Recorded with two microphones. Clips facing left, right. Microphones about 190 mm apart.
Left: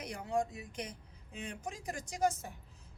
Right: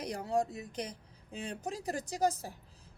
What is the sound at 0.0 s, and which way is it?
A woman's voice, 35° right (ahead or behind).